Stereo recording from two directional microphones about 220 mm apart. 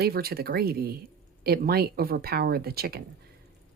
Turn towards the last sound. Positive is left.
turn(degrees=-45)  # may be behind; listen again after turning